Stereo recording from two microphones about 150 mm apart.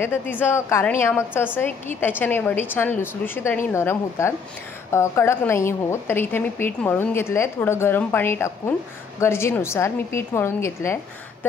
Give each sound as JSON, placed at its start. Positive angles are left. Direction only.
{"t": 0.0, "sound": "a woman's voice", "side_deg": 15}